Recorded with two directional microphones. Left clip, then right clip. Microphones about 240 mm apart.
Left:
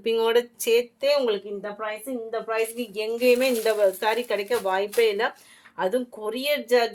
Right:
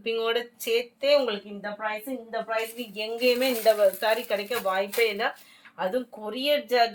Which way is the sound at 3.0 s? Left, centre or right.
Left.